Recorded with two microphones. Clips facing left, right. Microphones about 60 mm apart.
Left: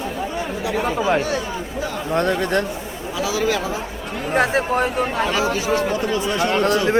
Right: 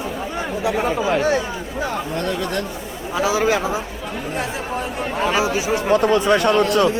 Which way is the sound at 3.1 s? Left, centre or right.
Right.